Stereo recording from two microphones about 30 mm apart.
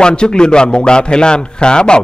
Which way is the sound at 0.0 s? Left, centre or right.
Left.